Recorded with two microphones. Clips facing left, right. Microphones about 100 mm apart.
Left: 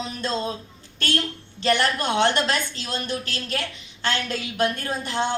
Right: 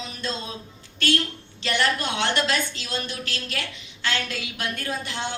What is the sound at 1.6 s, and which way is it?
A woman's voice, 40° left (ahead or behind).